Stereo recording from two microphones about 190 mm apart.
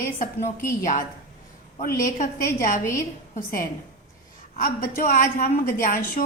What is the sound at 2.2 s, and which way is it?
Speech, 40° left (ahead or behind).